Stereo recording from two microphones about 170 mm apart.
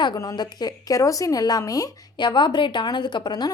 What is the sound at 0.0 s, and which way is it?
A woman's voice, 20° left (ahead or behind).